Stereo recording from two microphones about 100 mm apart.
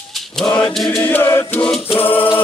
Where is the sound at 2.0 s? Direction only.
20° left (ahead or behind).